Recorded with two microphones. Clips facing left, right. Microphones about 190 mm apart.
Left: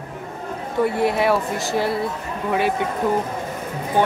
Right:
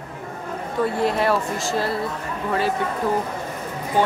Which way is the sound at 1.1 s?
15° left (ahead or behind).